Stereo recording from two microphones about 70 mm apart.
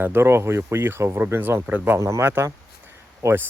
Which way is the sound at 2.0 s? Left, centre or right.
Right.